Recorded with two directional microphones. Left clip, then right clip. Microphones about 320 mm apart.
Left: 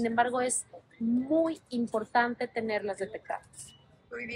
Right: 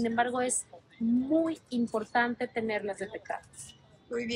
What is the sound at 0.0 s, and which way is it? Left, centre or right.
A woman's voice, centre.